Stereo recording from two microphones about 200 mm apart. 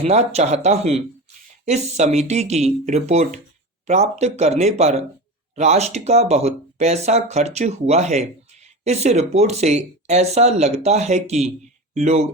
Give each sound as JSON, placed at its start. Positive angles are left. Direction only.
{"t": 0.0, "sound": "speech", "side_deg": -30}